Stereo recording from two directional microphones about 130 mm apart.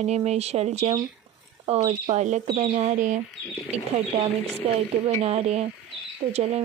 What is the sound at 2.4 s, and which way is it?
Speech, 45° right (ahead or behind).